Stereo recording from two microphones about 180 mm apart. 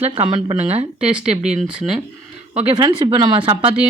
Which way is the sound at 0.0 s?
30° right (ahead or behind).